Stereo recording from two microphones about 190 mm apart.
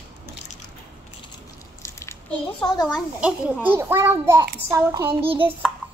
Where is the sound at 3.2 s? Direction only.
10° right (ahead or behind).